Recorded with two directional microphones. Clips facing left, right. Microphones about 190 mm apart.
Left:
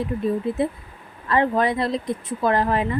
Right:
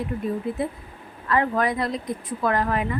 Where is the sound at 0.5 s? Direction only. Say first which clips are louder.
Left 4 dB; 25° left (ahead or behind).